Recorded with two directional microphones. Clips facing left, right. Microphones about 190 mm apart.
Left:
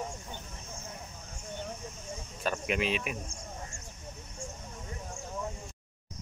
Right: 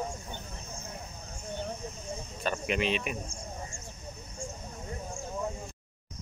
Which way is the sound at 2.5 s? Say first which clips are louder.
Right 1 dB; 5° left (ahead or behind).